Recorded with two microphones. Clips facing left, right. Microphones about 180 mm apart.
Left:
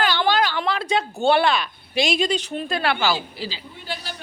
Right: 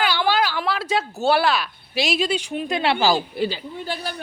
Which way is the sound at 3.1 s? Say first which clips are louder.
Right 5 dB; 55° right (ahead or behind).